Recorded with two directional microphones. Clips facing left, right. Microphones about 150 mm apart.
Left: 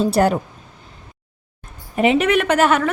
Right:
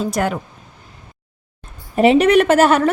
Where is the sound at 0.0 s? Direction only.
35° left (ahead or behind).